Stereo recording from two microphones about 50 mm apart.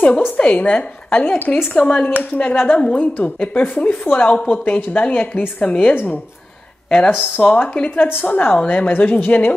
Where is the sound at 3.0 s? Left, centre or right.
Left.